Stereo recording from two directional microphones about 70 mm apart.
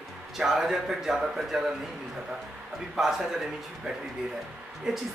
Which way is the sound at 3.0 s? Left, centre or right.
Centre.